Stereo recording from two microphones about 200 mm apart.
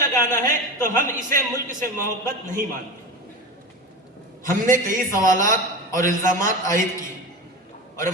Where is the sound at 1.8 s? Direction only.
15° left (ahead or behind).